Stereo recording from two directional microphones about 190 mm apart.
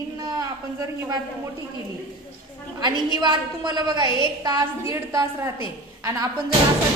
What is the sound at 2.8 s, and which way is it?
A woman's voice, 20° right (ahead or behind).